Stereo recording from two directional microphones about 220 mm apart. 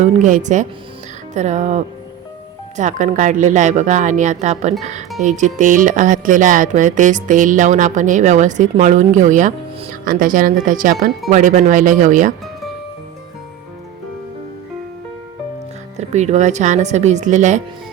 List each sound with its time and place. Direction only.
0.0 s speech: 35° right (ahead or behind)
16.0 s speech: 30° right (ahead or behind)